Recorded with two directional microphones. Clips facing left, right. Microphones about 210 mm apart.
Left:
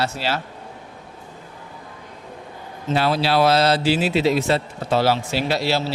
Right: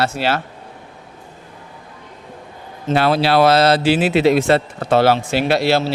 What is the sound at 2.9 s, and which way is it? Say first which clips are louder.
A man's voice: right 4 dB; 65° right (ahead or behind).